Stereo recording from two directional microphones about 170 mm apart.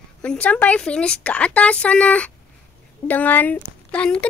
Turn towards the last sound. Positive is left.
turn(degrees=5)  # may be behind; listen again after turning